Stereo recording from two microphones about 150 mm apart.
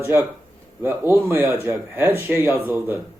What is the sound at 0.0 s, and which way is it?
Speech, 15° right (ahead or behind).